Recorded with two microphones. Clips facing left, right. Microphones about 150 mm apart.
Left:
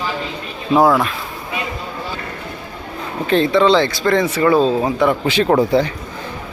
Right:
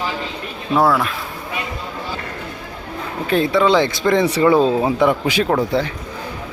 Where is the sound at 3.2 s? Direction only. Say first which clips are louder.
Left 2 dB; 5° right (ahead or behind).